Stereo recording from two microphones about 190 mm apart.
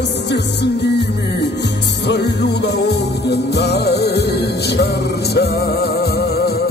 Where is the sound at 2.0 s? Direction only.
60° left (ahead or behind).